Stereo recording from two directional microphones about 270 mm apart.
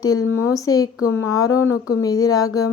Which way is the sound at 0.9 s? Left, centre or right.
Left.